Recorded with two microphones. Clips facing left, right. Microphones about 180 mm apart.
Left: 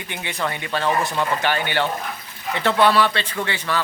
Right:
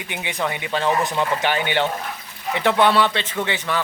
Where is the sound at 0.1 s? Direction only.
15° right (ahead or behind).